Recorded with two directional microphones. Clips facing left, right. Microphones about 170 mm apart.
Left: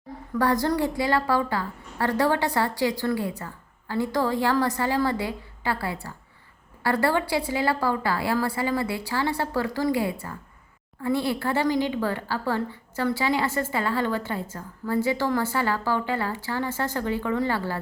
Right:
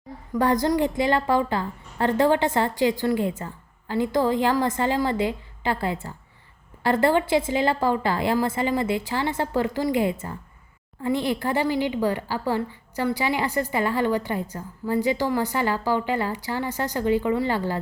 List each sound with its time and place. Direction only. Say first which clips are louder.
0.3 s a woman's voice: right 2 dB; 20° right (ahead or behind)